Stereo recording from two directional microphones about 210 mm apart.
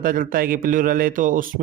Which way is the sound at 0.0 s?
40° right (ahead or behind).